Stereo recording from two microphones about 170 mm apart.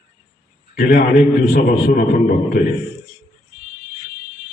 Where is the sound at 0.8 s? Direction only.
60° left (ahead or behind).